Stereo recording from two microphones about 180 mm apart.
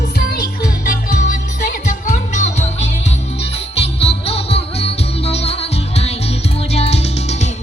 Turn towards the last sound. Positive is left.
turn(degrees=35)  # may be behind; listen again after turning